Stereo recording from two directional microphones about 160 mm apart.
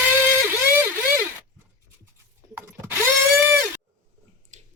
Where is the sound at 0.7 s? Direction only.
15° right (ahead or behind).